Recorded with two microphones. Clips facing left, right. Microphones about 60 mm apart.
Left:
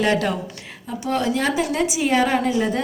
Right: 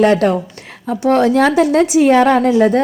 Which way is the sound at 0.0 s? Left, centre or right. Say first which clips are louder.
Right 8 dB; right.